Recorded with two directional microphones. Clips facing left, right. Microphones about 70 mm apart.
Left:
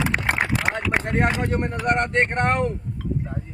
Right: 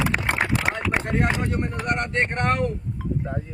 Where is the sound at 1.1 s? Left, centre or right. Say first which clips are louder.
Left 3 dB; left.